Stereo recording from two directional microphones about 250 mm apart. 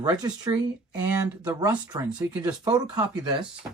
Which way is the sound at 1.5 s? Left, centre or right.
Centre.